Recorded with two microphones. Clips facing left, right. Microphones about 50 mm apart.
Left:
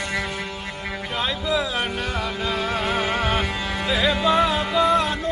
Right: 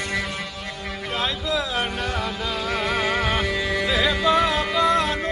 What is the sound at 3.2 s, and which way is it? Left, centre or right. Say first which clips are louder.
Music: even; centre.